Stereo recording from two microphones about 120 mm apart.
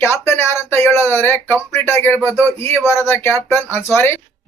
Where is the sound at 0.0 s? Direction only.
20° left (ahead or behind).